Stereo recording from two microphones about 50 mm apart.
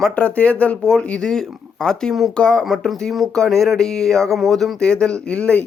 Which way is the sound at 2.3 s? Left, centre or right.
Centre.